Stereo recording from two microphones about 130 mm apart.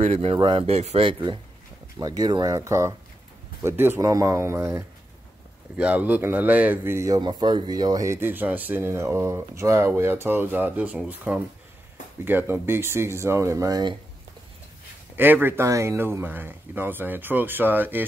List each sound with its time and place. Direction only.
0.0 s speech: 55° right (ahead or behind)
2.0 s speech: 30° right (ahead or behind)
7.2 s speech: 35° right (ahead or behind)
15.1 s speech: 15° right (ahead or behind)